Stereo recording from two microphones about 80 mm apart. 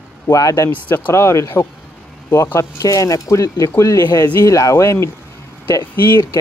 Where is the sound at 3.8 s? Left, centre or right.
Left.